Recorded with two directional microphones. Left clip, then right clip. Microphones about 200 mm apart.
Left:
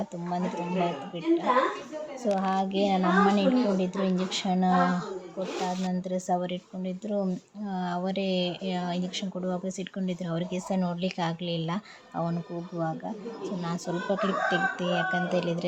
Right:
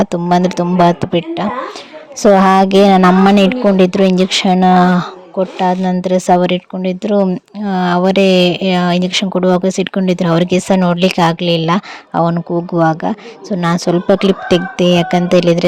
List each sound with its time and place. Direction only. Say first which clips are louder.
0.0 s speech: right 19 dB; 60° right (ahead or behind)